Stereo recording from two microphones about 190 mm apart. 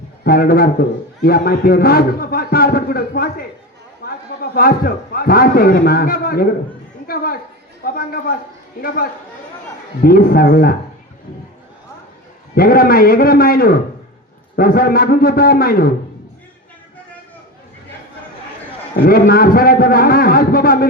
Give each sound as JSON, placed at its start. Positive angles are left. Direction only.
{"t": 0.3, "sound": "a man's voice", "side_deg": 50}
{"t": 4.5, "sound": "a man's voice", "side_deg": 50}
{"t": 7.9, "sound": "a man's voice", "side_deg": 50}
{"t": 10.0, "sound": "a man's voice", "side_deg": 50}
{"t": 12.5, "sound": "a man's voice", "side_deg": 50}
{"t": 19.0, "sound": "a man's voice", "side_deg": 50}